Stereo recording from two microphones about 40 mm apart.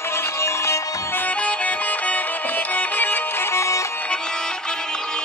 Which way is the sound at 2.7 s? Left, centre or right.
Left.